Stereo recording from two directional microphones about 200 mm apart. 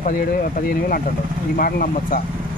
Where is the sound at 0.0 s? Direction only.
45° left (ahead or behind).